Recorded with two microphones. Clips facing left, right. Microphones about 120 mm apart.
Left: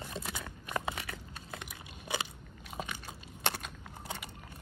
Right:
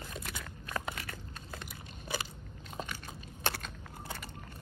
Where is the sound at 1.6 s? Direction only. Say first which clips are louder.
Even; 20° left (ahead or behind).